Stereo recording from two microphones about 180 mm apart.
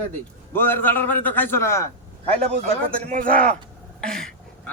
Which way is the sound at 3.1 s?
50° right (ahead or behind).